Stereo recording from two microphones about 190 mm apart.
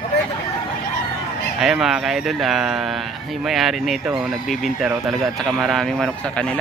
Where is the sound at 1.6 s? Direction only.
Centre (ahead or behind).